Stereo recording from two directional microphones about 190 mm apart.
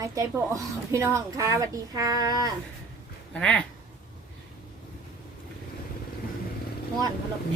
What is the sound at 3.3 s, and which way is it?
Speech, 5° left (ahead or behind).